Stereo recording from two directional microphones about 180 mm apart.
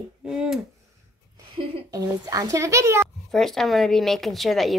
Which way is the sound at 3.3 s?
Centre (ahead or behind).